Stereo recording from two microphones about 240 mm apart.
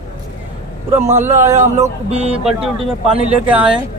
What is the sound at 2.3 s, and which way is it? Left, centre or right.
Speech, centre.